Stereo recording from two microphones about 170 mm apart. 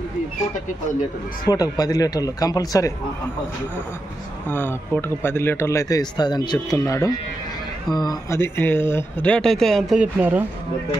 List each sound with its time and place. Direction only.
1.4 s speech: 20° left (ahead or behind)
4.5 s speech: 10° left (ahead or behind); by 10.4 s 10° right (ahead or behind)